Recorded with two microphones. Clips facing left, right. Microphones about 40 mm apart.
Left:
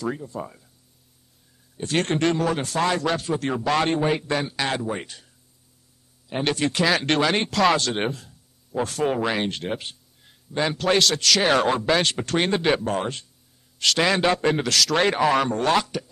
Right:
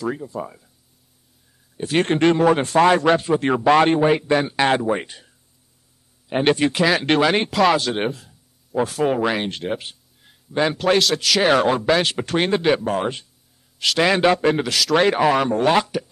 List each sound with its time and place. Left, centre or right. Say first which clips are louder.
0.0 s speech: right 3 dB; centre
1.8 s speech: right 4 dB; centre
2.0 s a man's voice: right 8 dB; right
4.4 s a man's voice: right 7 dB; right
6.7 s speech: right 3 dB; centre